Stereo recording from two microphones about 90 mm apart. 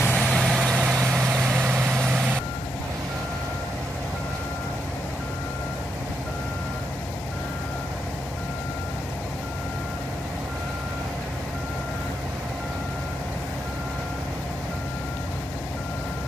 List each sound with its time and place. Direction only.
0.0 s vehicle: 15° left (ahead or behind)
0.3 s vehicle: 5° left (ahead or behind)
1.1 s vehicle: 15° right (ahead or behind)
2.0 s vehicle: centre (ahead or behind)